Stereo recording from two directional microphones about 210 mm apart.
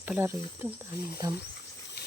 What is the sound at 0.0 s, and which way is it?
Speech, 10° right (ahead or behind).